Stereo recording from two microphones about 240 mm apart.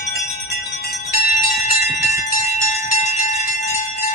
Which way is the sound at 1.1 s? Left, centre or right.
Left.